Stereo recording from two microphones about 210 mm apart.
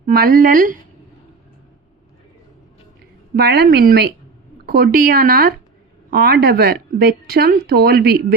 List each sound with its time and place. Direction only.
0.0 s speech: 45° right (ahead or behind)
3.3 s speech: 50° right (ahead or behind)